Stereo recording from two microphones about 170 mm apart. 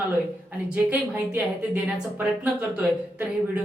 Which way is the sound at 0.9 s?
10° right (ahead or behind).